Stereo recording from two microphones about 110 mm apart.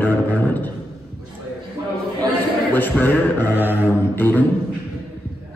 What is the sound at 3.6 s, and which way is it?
Mantra, 15° right (ahead or behind).